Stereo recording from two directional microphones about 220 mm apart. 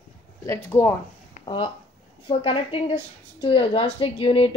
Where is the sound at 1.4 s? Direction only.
20° left (ahead or behind).